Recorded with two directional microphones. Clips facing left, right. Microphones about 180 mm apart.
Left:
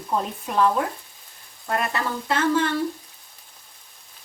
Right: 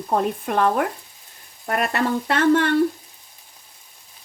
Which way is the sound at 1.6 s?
70° right (ahead or behind).